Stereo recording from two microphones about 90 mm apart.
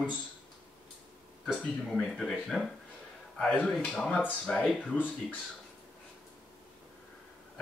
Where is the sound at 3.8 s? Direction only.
5° left (ahead or behind).